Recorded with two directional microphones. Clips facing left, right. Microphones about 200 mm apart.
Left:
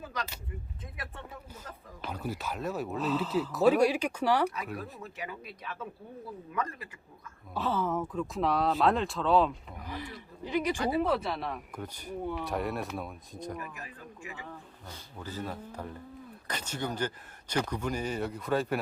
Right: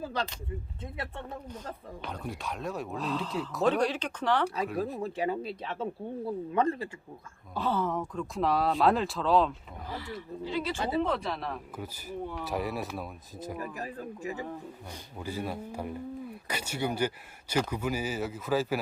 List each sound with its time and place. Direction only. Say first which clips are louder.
0.0 s a sound: right 5 dB; 30° right (ahead or behind)
2.0 s speech: left 4 dB; 5° left (ahead or behind)
5.0 s speech: right 10 dB; 30° right (ahead or behind)
7.5 s speech: right 1 dB; centre (ahead or behind)
9.8 s speech: right 3 dB; 15° left (ahead or behind)
11.0 s speech: left 1 dB; 5° left (ahead or behind)
13.6 s speech: right 6 dB; 35° right (ahead or behind)
15.2 s speech: right 3 dB; 10° right (ahead or behind)